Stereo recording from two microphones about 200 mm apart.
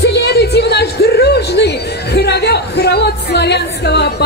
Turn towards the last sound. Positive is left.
turn(degrees=55)  # may be behind; listen again after turning